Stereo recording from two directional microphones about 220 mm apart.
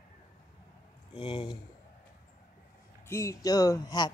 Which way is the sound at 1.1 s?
25° left (ahead or behind).